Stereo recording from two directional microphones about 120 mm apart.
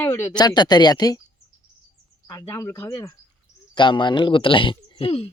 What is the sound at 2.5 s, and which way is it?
Speech, 20° left (ahead or behind).